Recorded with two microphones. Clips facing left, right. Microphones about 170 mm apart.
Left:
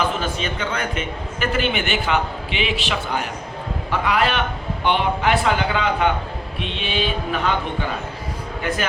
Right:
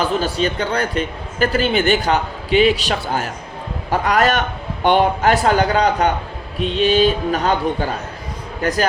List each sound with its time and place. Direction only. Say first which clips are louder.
0.0 s a man's voice: right 5 dB; 35° right (ahead or behind)